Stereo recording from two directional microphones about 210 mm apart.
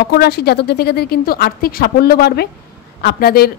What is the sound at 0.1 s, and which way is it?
A woman's voice, 50° left (ahead or behind).